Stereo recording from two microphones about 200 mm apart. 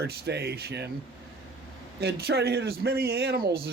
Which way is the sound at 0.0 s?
55° right (ahead or behind).